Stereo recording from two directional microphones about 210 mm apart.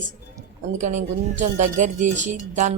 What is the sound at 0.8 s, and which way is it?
Speech, 35° right (ahead or behind).